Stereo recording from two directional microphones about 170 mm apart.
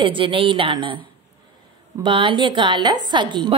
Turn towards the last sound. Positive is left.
turn(degrees=-25)  # may be behind; listen again after turning